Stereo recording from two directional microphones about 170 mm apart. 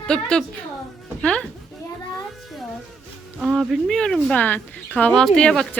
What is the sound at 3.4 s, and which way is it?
Speech, centre (ahead or behind).